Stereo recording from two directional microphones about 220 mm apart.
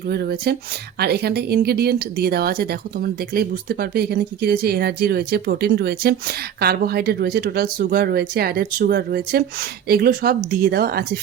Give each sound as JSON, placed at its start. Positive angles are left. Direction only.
{"t": 0.1, "sound": "speech", "side_deg": -45}